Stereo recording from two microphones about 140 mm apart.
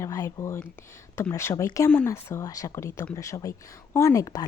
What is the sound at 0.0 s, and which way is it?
A woman's voice, 25° left (ahead or behind).